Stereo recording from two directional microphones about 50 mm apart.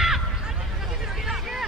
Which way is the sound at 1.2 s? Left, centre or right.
Centre.